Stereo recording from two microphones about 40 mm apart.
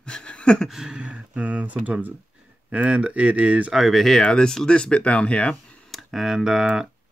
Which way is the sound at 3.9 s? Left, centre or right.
Centre.